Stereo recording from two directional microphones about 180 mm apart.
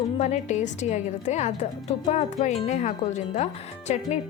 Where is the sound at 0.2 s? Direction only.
40° left (ahead or behind).